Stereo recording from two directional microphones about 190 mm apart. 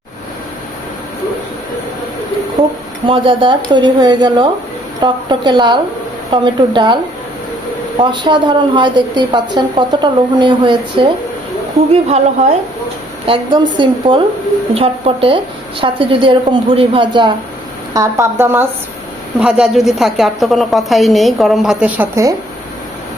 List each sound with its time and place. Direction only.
3.1 s a woman's voice: 25° right (ahead or behind)
8.0 s a woman's voice: 25° right (ahead or behind)